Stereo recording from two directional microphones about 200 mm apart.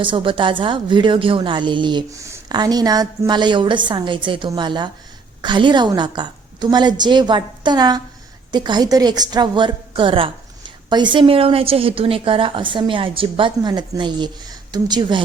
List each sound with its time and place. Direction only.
0.0 s a woman's voice: 25° right (ahead or behind)